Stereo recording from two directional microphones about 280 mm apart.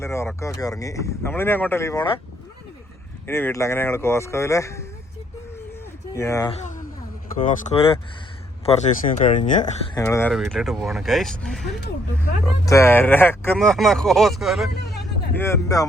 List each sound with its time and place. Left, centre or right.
0.0 s speech: centre
3.2 s speech: centre
6.1 s speech: centre
6.6 s a sound: left
7.4 s speech: left
9.9 s speech: centre
15.4 s speech: centre